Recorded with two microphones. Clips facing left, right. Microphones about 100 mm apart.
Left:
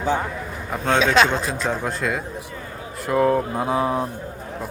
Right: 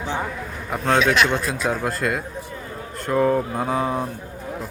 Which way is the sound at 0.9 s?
25° left (ahead or behind).